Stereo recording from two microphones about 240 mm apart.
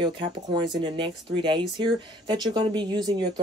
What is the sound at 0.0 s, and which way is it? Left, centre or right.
Speech, centre.